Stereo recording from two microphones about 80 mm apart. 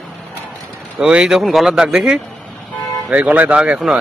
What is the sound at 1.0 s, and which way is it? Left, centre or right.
Speech, centre.